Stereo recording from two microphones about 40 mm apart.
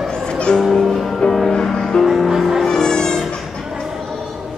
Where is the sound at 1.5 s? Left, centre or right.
Centre.